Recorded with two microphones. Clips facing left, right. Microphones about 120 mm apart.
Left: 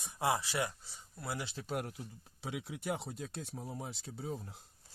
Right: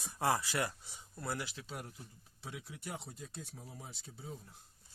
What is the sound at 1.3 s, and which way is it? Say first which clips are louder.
Speech: left 2 dB; 25° left (ahead or behind).